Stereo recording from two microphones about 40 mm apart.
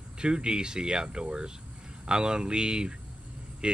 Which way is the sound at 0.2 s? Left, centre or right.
Right.